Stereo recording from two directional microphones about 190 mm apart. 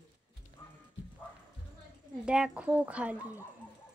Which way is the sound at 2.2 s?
5° right (ahead or behind).